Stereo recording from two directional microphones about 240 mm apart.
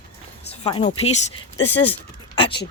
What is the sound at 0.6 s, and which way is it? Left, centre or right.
Speech, left.